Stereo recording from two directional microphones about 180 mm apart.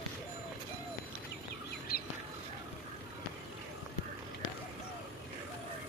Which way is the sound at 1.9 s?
60° left (ahead or behind).